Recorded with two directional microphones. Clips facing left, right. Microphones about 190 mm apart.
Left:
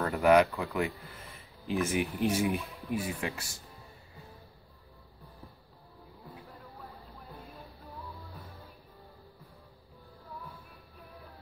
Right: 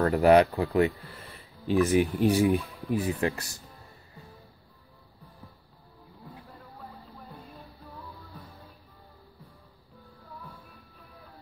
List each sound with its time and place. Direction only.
0.0 s speech: 40° right (ahead or behind)